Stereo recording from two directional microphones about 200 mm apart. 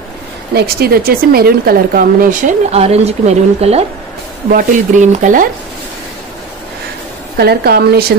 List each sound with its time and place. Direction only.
0.6 s speech: 50° right (ahead or behind); by 3.8 s 30° right (ahead or behind)
4.5 s speech: 40° right (ahead or behind)
7.3 s speech: 50° right (ahead or behind)